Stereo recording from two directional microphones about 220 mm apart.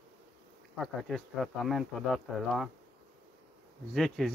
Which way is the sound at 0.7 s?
Centre (ahead or behind).